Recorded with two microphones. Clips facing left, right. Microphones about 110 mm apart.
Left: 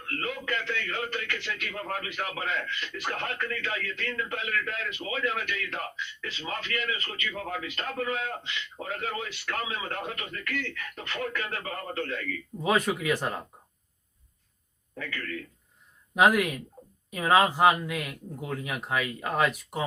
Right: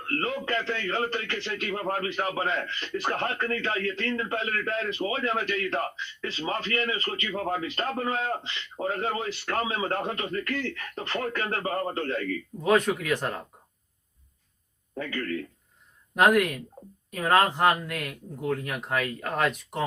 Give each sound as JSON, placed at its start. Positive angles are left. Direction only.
{"t": 0.0, "sound": "a man's voice", "side_deg": -35}
{"t": 12.6, "sound": "speech", "side_deg": 5}
{"t": 14.9, "sound": "a man's voice", "side_deg": -35}
{"t": 16.1, "sound": "speech", "side_deg": 5}